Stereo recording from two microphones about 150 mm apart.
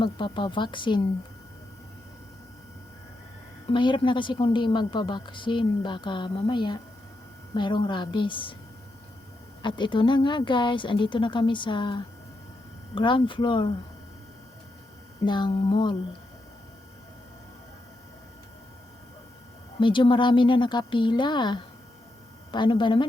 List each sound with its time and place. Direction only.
0.0 s a woman's voice: 35° left (ahead or behind)
3.7 s a woman's voice: 35° left (ahead or behind)
9.6 s a woman's voice: 30° left (ahead or behind)
15.2 s a sound: 30° left (ahead or behind)
19.8 s a woman's voice: 35° left (ahead or behind)